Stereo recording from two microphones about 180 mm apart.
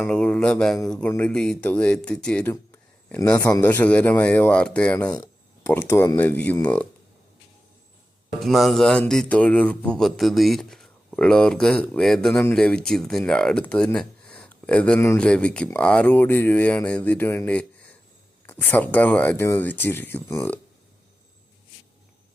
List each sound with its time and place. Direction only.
0.0 s speech: 5° left (ahead or behind)
2.5 s a sound: 15° left (ahead or behind)
3.5 s speech: 10° left (ahead or behind)
5.1 s a sound: 20° left (ahead or behind)
5.7 s speech: 10° left (ahead or behind)
8.4 s speech: centre (ahead or behind)